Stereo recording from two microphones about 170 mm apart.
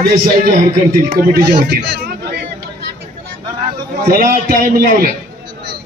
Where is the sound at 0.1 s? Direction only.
50° right (ahead or behind).